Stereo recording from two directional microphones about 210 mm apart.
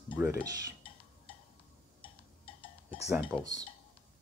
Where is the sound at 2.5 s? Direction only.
25° left (ahead or behind).